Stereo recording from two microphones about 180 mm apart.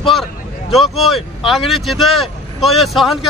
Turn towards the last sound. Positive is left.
turn(degrees=0)  # may be behind; listen again after turning